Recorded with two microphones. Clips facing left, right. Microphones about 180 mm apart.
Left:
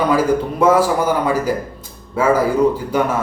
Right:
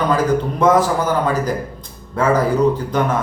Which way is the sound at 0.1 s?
10° left (ahead or behind).